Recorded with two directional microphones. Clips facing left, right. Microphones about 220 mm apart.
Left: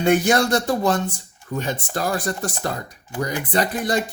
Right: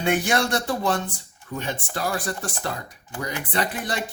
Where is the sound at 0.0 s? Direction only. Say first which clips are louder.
Left 5 dB; 40° left (ahead or behind).